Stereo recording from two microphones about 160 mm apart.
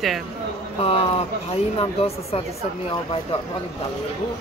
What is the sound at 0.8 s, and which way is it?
Speech, 40° left (ahead or behind).